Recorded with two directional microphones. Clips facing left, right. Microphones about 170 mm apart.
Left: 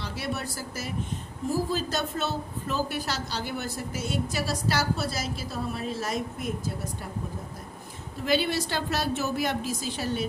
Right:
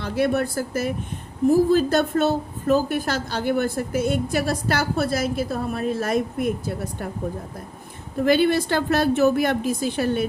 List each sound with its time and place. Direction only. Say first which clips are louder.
0.0 s a woman's voice: right 11 dB; 55° right (ahead or behind)
8.2 s a woman's voice: right 8 dB; 55° right (ahead or behind)